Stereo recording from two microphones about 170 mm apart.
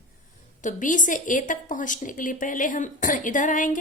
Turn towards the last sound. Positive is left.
turn(degrees=50)  # may be behind; listen again after turning